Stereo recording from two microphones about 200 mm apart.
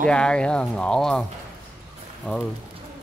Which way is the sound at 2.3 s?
5° left (ahead or behind).